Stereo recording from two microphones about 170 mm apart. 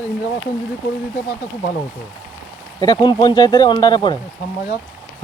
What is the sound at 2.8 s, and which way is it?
Speech, 25° left (ahead or behind).